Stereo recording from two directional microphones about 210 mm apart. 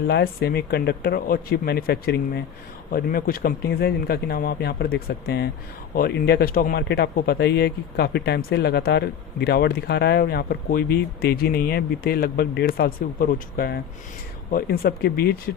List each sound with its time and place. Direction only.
0.1 s speech: 50° left (ahead or behind)